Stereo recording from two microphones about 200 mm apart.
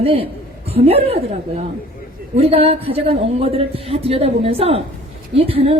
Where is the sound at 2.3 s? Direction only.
30° right (ahead or behind).